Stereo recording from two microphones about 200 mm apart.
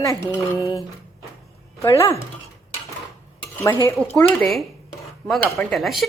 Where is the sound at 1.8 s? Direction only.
15° left (ahead or behind).